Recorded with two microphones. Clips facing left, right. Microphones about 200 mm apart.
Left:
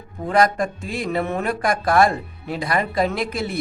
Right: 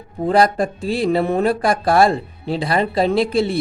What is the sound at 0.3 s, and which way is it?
Speech, 30° right (ahead or behind).